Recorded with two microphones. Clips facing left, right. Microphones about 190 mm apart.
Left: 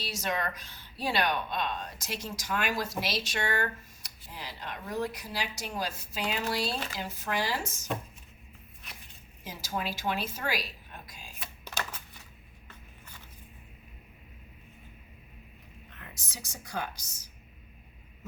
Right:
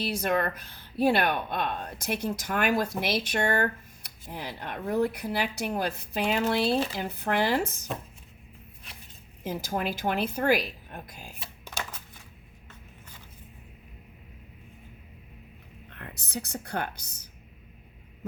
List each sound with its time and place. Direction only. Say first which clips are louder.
0.0 s speech: right 6 dB; 55° right (ahead or behind)
9.4 s speech: right 5 dB; 55° right (ahead or behind)
11.6 s a sound: even; 10° right (ahead or behind)
15.9 s speech: right 11 dB; 60° right (ahead or behind)